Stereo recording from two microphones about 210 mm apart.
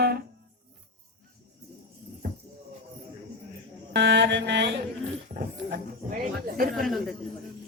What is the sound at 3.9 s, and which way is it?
Mantra, 55° right (ahead or behind).